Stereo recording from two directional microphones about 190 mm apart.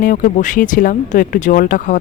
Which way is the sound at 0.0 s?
45° left (ahead or behind).